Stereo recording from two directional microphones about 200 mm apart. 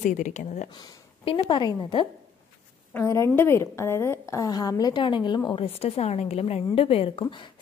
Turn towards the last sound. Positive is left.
turn(degrees=25)  # may be behind; listen again after turning